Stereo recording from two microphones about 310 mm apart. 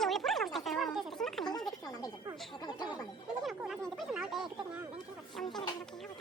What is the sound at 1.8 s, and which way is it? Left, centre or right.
Speech, centre.